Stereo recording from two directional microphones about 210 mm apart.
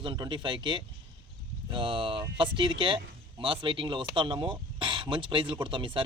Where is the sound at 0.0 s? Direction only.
20° right (ahead or behind).